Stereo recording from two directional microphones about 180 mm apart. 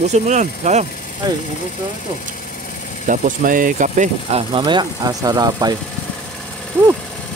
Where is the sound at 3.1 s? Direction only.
45° right (ahead or behind); by 5.8 s 20° right (ahead or behind).